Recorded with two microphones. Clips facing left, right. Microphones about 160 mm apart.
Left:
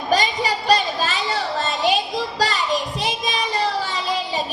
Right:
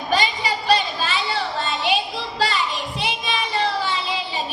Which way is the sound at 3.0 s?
40° left (ahead or behind).